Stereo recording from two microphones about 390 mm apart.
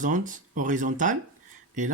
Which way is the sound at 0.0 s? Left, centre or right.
Centre.